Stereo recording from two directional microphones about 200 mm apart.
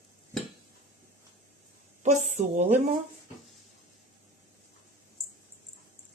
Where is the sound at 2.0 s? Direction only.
35° right (ahead or behind).